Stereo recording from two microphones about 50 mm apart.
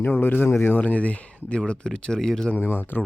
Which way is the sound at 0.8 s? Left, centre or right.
Left.